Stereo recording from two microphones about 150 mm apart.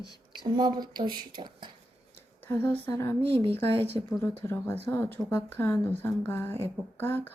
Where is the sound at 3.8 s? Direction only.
40° right (ahead or behind).